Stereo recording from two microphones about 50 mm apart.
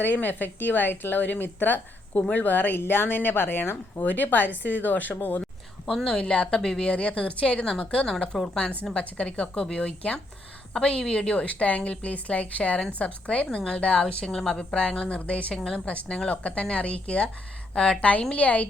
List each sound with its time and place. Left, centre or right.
0.0 s speech: left
2.7 s speech: left
5.8 s a woman's voice: centre
6.9 s a woman's voice: left
8.1 s a woman's voice: centre
8.9 s a woman's voice: left
14.3 s a woman's voice: centre; by 18.7 s left